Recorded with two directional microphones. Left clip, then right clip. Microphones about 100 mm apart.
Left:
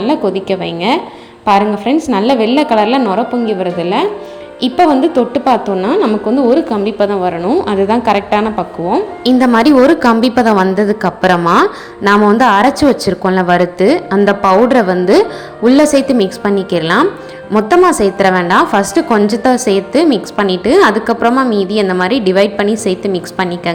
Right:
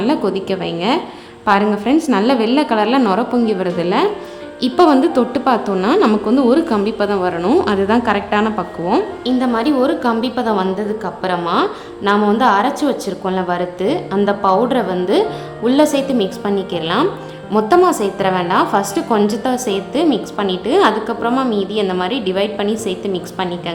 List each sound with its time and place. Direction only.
0.0 s a woman's voice: 10° left (ahead or behind)
3.1 s a woman's voice: centre (ahead or behind)
9.4 s a woman's voice: 75° left (ahead or behind)
10.8 s a woman's voice: 75° left (ahead or behind)
12.4 s a woman's voice: 55° left (ahead or behind)
17.5 s a woman's voice: 40° left (ahead or behind)